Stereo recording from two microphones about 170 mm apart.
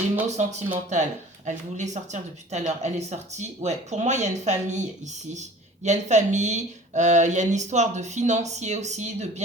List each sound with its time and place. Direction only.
0.3 s speech: 45° right (ahead or behind)